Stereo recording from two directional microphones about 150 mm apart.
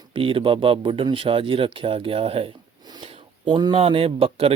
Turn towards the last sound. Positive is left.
turn(degrees=-40)  # may be behind; listen again after turning